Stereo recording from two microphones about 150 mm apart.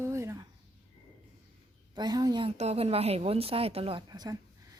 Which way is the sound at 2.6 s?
45° right (ahead or behind).